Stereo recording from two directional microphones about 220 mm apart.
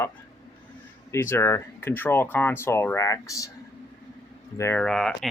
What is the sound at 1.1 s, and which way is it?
Speech, 10° left (ahead or behind).